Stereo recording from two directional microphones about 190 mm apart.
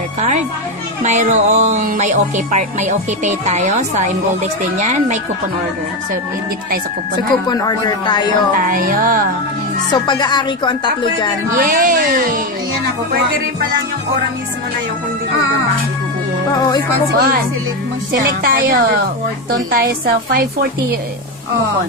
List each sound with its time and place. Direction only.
1.0 s speech: 40° right (ahead or behind)
7.4 s speech: 20° left (ahead or behind)
8.5 s speech: 45° right (ahead or behind)
10.0 s speech: 25° left (ahead or behind)
11.5 s speech: 45° right (ahead or behind)
16.5 s speech: 20° left (ahead or behind)
17.1 s speech: 55° right (ahead or behind)
18.4 s speech: 50° right (ahead or behind)